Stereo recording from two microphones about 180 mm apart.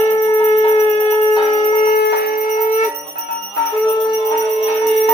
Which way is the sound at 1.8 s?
60° left (ahead or behind).